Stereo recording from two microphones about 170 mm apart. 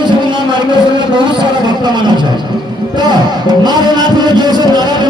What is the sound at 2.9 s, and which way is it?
Music, 25° right (ahead or behind).